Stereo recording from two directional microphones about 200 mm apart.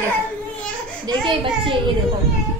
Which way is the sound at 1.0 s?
25° right (ahead or behind).